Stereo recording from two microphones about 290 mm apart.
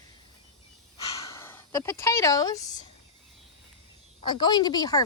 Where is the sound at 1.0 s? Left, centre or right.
Centre.